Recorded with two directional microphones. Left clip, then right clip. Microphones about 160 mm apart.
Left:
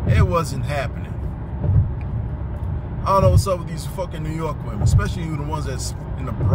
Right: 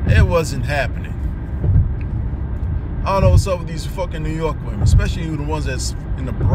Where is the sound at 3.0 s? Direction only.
20° left (ahead or behind).